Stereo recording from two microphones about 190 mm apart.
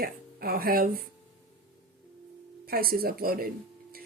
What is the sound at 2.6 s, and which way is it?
Speech, 50° right (ahead or behind).